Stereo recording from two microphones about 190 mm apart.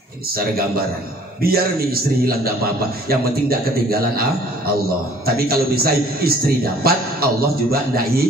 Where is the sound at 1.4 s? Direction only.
50° right (ahead or behind).